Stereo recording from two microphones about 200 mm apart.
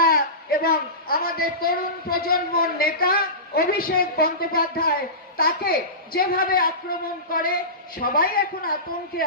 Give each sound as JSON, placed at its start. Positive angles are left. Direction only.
{"t": 0.0, "sound": "a man's voice", "side_deg": 50}